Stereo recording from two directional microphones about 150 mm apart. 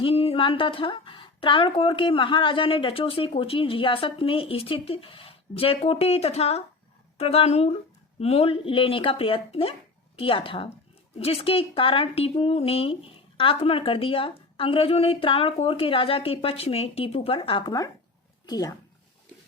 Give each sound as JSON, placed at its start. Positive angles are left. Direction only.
{"t": 0.0, "sound": "speech", "side_deg": 40}